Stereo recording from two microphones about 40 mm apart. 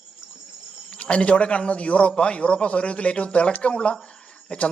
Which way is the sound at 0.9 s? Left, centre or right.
Left.